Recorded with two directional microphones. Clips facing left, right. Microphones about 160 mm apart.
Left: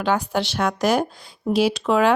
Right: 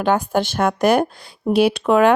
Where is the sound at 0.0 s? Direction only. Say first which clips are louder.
Right 4 dB; 50° right (ahead or behind).